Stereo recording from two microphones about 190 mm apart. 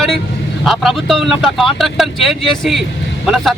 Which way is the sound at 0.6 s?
Centre (ahead or behind).